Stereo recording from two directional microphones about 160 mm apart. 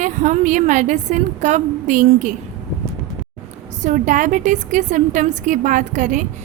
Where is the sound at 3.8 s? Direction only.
50° right (ahead or behind).